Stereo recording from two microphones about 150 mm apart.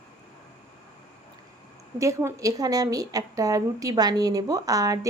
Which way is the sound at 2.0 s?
20° right (ahead or behind).